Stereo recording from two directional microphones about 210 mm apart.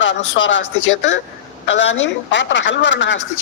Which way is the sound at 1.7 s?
60° left (ahead or behind).